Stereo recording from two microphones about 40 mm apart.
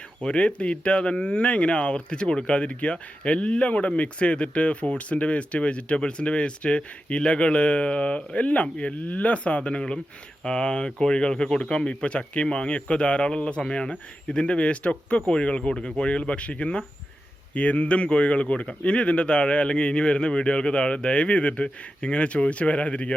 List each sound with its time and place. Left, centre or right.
0.2 s speech: left